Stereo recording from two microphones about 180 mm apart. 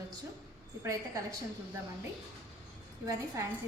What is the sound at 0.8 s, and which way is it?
Speech, 15° right (ahead or behind).